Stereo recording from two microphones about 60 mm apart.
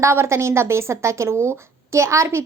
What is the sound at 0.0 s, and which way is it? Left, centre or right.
A woman's voice, right.